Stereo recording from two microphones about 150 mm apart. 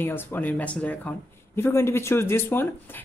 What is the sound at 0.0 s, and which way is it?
A man's voice, 15° left (ahead or behind).